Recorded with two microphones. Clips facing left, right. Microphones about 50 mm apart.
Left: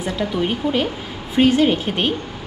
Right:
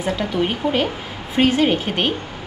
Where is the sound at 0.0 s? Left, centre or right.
Centre.